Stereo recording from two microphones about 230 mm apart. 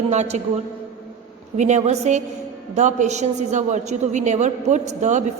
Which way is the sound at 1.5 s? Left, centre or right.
Right.